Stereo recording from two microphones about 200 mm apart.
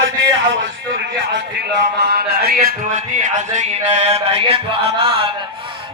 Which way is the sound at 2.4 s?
45° right (ahead or behind).